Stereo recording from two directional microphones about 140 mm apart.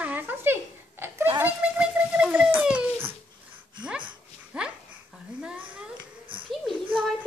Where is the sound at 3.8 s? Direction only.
5° right (ahead or behind).